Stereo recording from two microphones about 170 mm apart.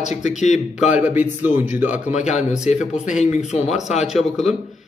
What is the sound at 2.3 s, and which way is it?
Speech, 45° left (ahead or behind).